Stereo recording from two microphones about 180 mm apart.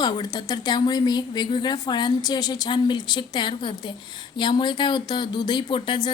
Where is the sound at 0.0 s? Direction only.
25° left (ahead or behind).